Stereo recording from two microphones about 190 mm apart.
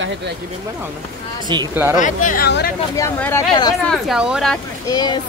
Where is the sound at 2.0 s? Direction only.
45° left (ahead or behind).